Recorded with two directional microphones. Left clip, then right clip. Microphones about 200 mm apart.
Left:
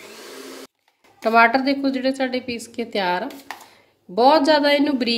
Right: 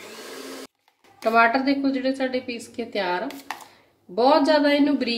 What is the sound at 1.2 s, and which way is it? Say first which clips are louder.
A woman's voice: left 3 dB; 50° left (ahead or behind).